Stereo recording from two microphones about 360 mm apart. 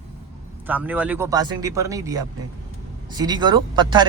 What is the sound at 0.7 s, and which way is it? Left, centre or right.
Speech, centre.